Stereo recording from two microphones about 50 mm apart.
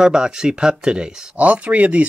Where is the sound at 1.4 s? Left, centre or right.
Right.